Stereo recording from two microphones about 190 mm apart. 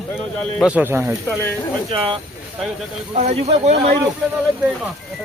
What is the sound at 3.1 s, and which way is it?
Speech, 35° right (ahead or behind).